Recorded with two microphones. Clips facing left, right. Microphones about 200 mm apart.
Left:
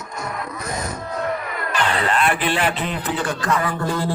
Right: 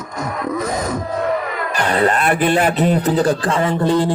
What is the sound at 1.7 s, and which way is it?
A man's voice, 40° right (ahead or behind).